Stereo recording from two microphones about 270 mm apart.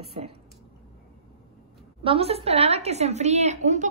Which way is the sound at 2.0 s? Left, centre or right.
Right.